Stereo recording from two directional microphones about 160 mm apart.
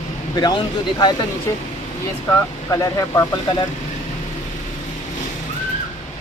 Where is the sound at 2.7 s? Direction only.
20° left (ahead or behind).